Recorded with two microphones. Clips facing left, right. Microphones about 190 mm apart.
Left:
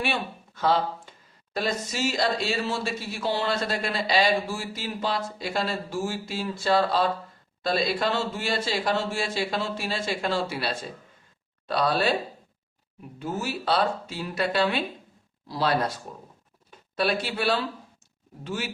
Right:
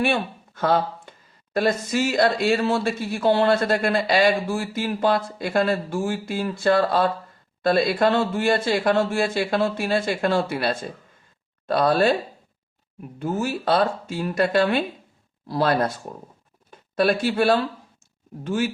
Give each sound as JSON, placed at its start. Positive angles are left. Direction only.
{"t": 0.0, "sound": "speech", "side_deg": -55}
{"t": 13.1, "sound": "speech", "side_deg": -50}
{"t": 16.9, "sound": "speech", "side_deg": -50}